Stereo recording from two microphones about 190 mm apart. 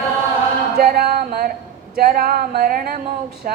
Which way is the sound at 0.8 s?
55° right (ahead or behind).